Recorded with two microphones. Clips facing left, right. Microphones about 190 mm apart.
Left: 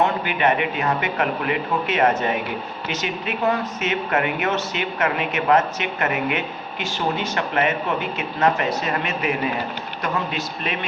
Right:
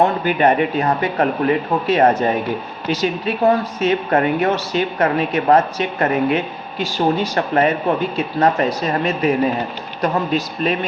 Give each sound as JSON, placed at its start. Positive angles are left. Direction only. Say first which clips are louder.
{"t": 0.0, "sound": "speech", "louder": "right 5 dB", "side_deg": -40}